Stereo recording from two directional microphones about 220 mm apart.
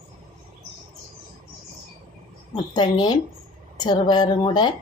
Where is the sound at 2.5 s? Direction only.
20° left (ahead or behind).